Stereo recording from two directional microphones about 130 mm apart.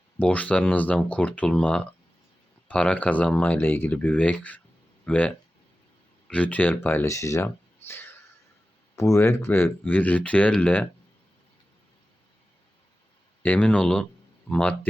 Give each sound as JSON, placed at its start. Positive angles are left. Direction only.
{"t": 0.2, "sound": "speech", "side_deg": 10}
{"t": 7.4, "sound": "a sound", "side_deg": 15}
{"t": 9.0, "sound": "speech", "side_deg": 20}
{"t": 13.4, "sound": "speech", "side_deg": 10}